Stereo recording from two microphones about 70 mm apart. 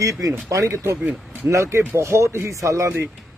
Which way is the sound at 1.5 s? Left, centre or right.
Right.